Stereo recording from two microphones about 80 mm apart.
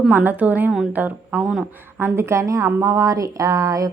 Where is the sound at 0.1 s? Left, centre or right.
Right.